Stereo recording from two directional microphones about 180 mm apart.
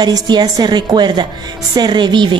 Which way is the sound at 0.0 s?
25° right (ahead or behind).